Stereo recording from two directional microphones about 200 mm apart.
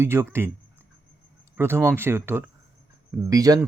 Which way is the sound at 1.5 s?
10° right (ahead or behind).